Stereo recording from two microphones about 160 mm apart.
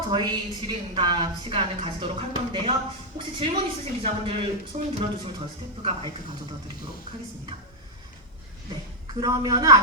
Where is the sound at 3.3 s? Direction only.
30° right (ahead or behind).